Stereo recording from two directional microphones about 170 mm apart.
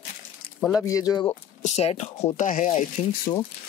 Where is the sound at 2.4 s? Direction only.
50° left (ahead or behind).